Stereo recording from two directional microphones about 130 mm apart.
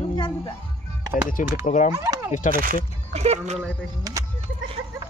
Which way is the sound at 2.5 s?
90° right.